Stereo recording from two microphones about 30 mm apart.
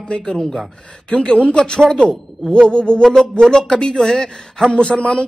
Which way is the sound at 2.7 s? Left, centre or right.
Left.